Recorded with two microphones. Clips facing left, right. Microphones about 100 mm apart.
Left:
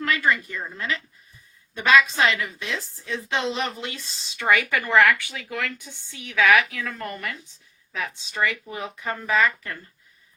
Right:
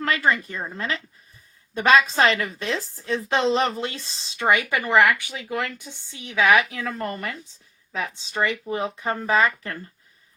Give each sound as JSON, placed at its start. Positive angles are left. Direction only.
{"t": 0.0, "sound": "a woman's voice", "side_deg": -30}